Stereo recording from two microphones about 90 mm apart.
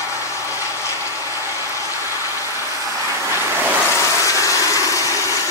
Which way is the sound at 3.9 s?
35° left (ahead or behind).